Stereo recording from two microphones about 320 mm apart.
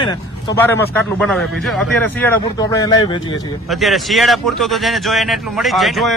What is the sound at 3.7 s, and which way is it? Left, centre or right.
Speech, centre.